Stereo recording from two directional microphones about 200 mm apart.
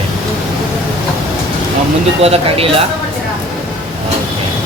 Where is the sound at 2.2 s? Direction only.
30° right (ahead or behind).